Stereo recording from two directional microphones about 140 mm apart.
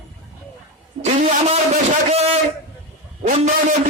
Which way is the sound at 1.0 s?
50° right (ahead or behind).